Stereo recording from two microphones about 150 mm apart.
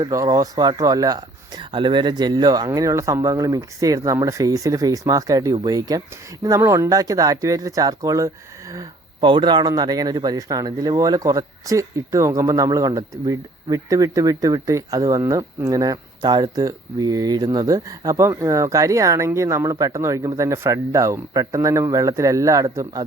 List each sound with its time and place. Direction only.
0.0 s speech: 25° right (ahead or behind)